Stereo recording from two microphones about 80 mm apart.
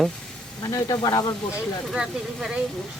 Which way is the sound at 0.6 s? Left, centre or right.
Left.